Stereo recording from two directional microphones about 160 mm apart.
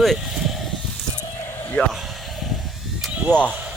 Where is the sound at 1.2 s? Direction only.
15° left (ahead or behind).